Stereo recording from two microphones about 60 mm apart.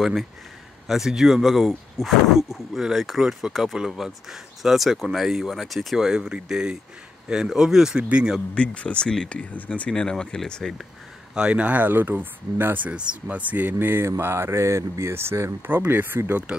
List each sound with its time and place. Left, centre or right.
0.0 s speech: centre
8.5 s speech: centre
11.3 s speech: centre; by 12.8 s right
12.8 s speech: centre
13.5 s speech: right
15.7 s speech: right